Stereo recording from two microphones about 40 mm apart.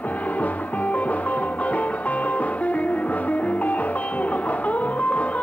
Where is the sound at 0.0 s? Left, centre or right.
Left.